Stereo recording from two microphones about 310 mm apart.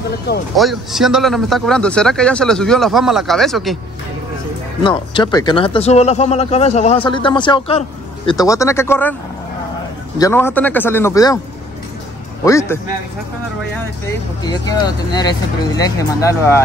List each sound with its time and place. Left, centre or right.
0.6 s a man's voice: centre
4.8 s speech: centre
10.1 s speech: centre
12.4 s speech: centre
14.0 s speech: centre